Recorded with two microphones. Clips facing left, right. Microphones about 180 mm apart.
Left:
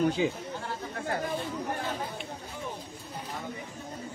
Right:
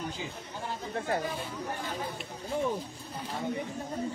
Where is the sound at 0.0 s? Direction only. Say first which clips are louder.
Left 12 dB; 75° left (ahead or behind).